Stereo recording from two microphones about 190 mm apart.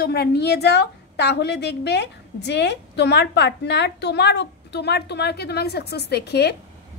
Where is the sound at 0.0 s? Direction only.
55° left (ahead or behind).